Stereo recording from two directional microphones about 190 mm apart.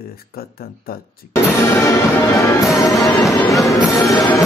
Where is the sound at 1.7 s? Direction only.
15° left (ahead or behind).